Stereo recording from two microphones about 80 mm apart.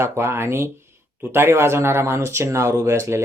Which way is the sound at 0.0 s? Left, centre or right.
Right.